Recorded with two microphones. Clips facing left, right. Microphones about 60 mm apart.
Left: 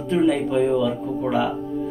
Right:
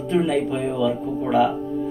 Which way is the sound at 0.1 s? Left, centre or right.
Centre.